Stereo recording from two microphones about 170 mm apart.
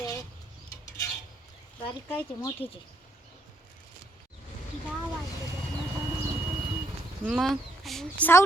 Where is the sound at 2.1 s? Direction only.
25° left (ahead or behind).